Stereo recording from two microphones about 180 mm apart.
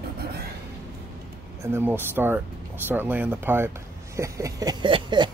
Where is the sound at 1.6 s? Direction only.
10° right (ahead or behind).